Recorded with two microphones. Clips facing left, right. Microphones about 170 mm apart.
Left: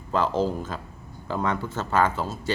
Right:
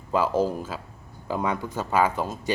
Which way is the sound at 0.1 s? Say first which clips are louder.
Right 1 dB; 10° right (ahead or behind).